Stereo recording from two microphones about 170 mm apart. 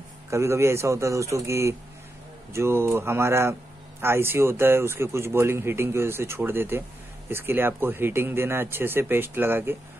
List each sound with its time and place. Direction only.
0.3 s a man's voice: 15° right (ahead or behind)